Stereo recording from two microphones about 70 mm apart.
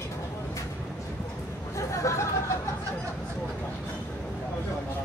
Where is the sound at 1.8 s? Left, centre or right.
Left.